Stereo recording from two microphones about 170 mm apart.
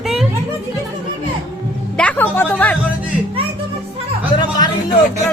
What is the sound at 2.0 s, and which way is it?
Speech, 10° left (ahead or behind).